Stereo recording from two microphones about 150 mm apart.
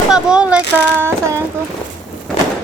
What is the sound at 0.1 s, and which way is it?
Speech, 5° right (ahead or behind).